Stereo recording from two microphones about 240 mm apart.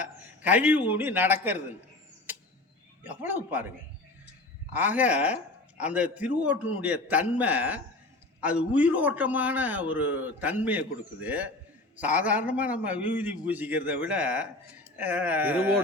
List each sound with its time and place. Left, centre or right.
0.0 s a man's voice: centre
3.0 s a man's voice: centre
4.7 s a man's voice: centre